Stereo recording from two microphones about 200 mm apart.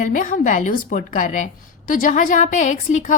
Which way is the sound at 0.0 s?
40° left (ahead or behind).